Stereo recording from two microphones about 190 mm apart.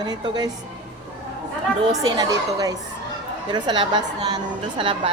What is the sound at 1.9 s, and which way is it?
A woman's voice, 20° right (ahead or behind).